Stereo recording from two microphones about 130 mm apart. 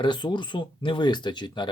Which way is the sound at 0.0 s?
35° left (ahead or behind).